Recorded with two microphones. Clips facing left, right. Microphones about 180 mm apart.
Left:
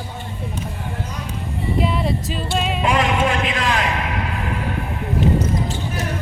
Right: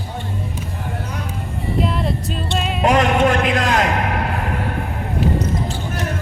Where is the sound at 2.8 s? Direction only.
45° right (ahead or behind).